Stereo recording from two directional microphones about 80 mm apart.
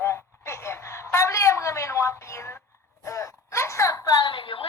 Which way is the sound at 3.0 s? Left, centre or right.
Left.